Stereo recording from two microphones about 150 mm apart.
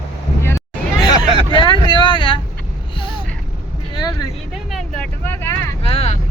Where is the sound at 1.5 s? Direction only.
35° left (ahead or behind).